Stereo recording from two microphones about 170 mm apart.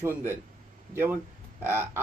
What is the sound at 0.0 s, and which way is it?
Speech, 15° right (ahead or behind).